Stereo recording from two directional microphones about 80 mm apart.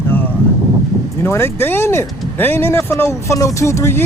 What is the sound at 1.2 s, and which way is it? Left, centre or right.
Speech, left.